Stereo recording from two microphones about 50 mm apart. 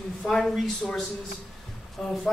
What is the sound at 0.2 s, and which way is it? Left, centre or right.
Speech, centre.